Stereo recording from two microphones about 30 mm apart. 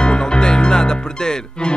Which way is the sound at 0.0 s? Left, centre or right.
Left.